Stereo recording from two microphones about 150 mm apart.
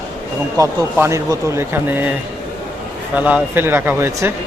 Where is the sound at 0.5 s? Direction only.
20° right (ahead or behind).